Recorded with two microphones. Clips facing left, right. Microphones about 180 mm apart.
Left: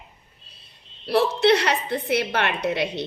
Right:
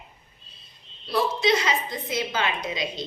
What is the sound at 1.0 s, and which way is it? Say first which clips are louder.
A woman's voice: left 5 dB; 65° left (ahead or behind).